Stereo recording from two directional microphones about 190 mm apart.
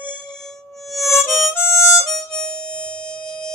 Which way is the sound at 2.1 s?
5° left (ahead or behind).